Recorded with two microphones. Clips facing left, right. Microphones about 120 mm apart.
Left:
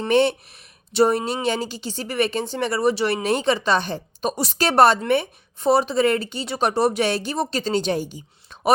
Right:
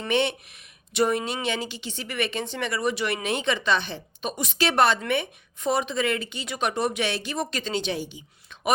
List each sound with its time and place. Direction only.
0.1 s a woman's voice: 40° left (ahead or behind)